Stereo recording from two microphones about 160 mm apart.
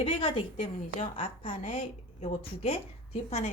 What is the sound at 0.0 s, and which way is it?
A woman's voice, 35° left (ahead or behind).